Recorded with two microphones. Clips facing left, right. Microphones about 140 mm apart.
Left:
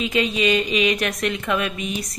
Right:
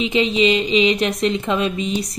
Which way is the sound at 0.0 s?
20° right (ahead or behind).